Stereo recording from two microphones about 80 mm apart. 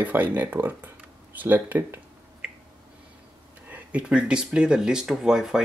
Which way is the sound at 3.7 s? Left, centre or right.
Centre.